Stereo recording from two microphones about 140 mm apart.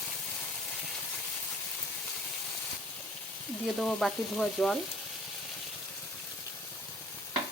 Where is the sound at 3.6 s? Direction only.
Centre (ahead or behind).